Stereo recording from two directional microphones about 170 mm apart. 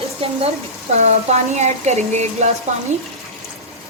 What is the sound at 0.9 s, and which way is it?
Speech, 40° right (ahead or behind).